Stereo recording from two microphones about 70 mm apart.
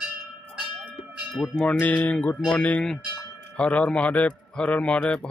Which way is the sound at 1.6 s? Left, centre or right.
Centre.